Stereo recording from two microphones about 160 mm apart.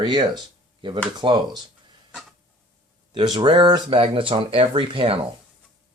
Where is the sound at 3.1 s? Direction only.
30° right (ahead or behind).